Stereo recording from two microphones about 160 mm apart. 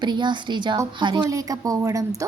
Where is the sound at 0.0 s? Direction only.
30° right (ahead or behind).